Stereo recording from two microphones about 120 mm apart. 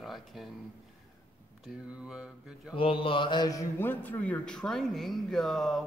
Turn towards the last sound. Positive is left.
turn(degrees=0)  # may be behind; listen again after turning